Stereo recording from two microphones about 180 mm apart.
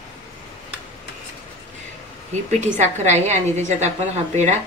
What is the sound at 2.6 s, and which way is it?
A woman's voice, 40° right (ahead or behind).